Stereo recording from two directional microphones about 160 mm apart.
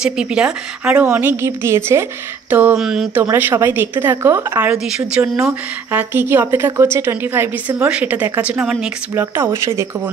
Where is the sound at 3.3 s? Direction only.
15° right (ahead or behind).